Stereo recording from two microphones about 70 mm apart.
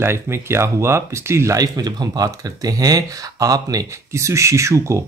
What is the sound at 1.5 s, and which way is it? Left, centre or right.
Speech, right.